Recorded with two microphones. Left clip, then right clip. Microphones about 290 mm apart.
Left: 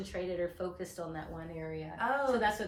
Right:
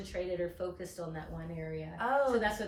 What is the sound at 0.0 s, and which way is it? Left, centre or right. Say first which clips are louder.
Speech: even; centre.